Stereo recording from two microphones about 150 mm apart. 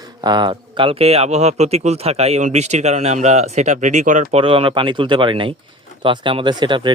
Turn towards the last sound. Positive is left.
turn(degrees=-30)  # may be behind; listen again after turning